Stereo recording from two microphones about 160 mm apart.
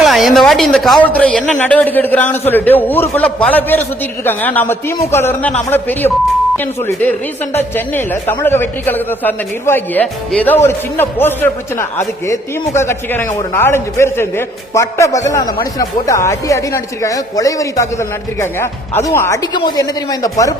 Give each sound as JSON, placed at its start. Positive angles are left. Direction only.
{"t": 0.0, "sound": "a man's voice", "side_deg": 0}